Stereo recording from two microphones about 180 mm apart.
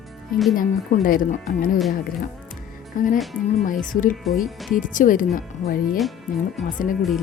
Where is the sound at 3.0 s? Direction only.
50° left (ahead or behind).